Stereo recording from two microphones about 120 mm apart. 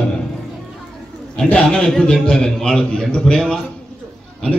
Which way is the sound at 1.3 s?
10° left (ahead or behind).